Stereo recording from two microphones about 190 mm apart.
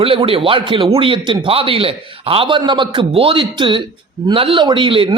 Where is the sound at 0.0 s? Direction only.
30° right (ahead or behind).